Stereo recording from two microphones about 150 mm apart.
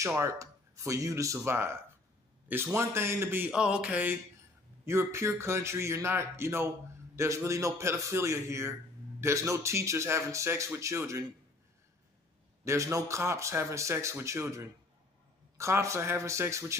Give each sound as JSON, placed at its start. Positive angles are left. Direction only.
{"t": 0.0, "sound": "speech", "side_deg": -20}
{"t": 12.6, "sound": "speech", "side_deg": -20}